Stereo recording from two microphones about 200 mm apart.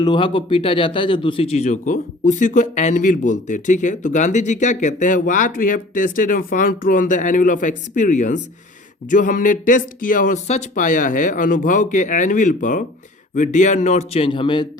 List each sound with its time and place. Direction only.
0.0 s a man's voice: 25° left (ahead or behind)